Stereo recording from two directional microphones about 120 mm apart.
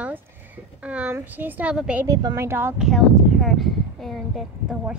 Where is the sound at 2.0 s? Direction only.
25° right (ahead or behind).